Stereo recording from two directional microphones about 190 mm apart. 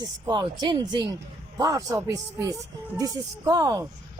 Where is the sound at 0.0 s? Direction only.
20° right (ahead or behind).